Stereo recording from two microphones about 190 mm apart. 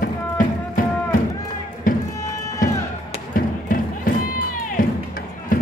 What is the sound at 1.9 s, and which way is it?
Music, 45° left (ahead or behind).